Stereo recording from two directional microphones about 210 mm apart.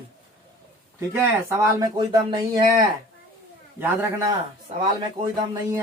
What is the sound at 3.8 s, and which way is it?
Speech, 10° right (ahead or behind).